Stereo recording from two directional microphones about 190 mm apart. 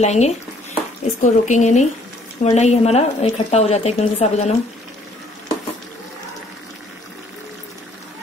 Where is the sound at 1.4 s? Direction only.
40° left (ahead or behind).